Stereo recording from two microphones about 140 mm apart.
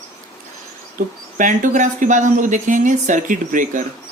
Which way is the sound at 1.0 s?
65° right (ahead or behind).